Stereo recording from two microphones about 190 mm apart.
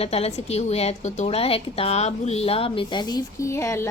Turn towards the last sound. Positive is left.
turn(degrees=15)  # may be behind; listen again after turning